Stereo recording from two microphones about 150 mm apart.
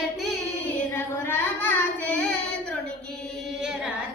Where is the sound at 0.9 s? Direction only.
15° left (ahead or behind).